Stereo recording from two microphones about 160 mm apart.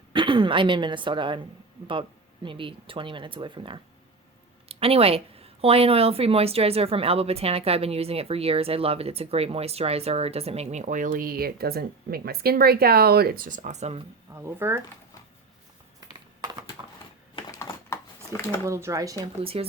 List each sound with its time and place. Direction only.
0.1 s a woman's voice: 30° right (ahead or behind)
14.3 s speech: 15° right (ahead or behind)
16.0 s a sound: 25° right (ahead or behind)
17.6 s a sound: 15° left (ahead or behind)
18.6 s speech: 20° right (ahead or behind)
19.4 s a woman's voice: 35° right (ahead or behind)